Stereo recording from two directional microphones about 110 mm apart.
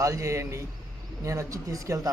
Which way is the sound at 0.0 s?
30° right (ahead or behind).